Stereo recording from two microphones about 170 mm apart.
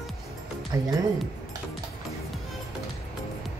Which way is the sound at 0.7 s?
20° right (ahead or behind).